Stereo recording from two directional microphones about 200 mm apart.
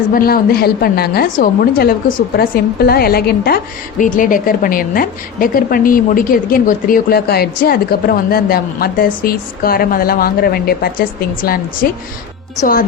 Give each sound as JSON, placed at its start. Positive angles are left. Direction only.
{"t": 0.1, "sound": "a woman's voice", "side_deg": 45}